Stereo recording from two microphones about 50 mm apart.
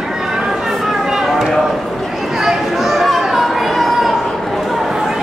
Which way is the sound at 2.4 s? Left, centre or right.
Centre.